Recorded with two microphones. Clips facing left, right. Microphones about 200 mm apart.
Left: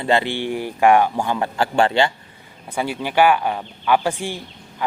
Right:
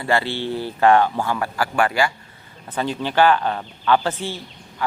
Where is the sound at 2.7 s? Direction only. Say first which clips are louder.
Even; 10° left (ahead or behind).